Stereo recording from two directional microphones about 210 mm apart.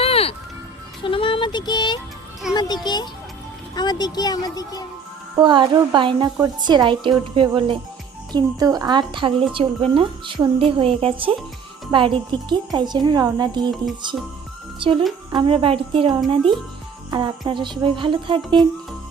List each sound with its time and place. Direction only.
0.0 s music: 30° left (ahead or behind)
2.5 s speech: 20° left (ahead or behind)
5.4 s a woman's voice: 20° right (ahead or behind)
15.3 s a woman's voice: 25° right (ahead or behind)